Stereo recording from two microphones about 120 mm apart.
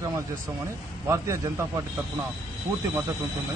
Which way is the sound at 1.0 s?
25° right (ahead or behind).